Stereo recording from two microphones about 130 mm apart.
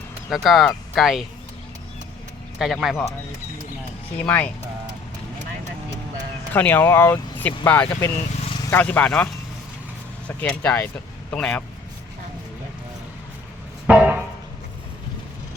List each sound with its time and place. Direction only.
0.3 s speech: centre (ahead or behind)
2.6 s speech: centre (ahead or behind)
4.2 s speech: 10° left (ahead or behind)
6.5 s speech: 15° left (ahead or behind)
13.8 s a sound: 10° right (ahead or behind)